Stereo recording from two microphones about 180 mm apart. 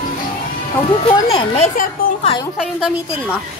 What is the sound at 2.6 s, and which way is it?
Speech, centre (ahead or behind).